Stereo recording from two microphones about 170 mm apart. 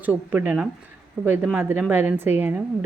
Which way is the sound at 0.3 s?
10° right (ahead or behind).